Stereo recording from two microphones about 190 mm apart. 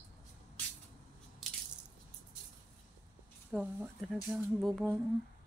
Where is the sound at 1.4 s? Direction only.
Centre (ahead or behind).